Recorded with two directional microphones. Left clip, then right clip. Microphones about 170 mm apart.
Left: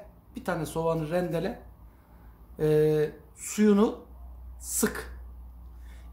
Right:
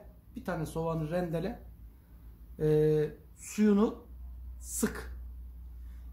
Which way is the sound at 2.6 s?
5° left (ahead or behind).